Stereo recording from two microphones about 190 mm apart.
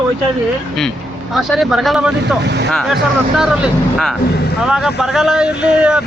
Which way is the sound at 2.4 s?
65° right (ahead or behind).